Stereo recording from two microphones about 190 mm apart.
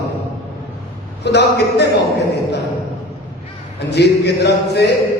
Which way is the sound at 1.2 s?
60° left (ahead or behind).